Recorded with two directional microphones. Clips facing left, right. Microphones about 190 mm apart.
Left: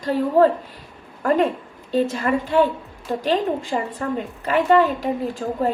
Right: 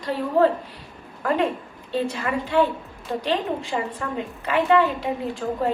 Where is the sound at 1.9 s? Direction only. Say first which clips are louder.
Left 5 dB; 45° left (ahead or behind).